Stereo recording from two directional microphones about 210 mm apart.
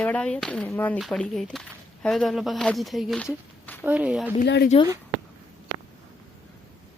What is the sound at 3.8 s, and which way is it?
Speech, 5° right (ahead or behind).